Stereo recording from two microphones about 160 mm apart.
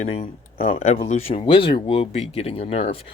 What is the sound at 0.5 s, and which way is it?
Speech, 60° left (ahead or behind).